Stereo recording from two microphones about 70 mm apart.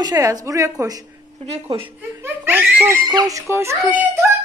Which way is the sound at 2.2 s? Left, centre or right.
Right.